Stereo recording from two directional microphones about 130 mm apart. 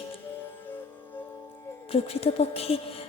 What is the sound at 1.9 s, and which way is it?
Speech, 50° left (ahead or behind).